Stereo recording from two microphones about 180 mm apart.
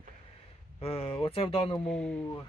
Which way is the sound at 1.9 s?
5° left (ahead or behind).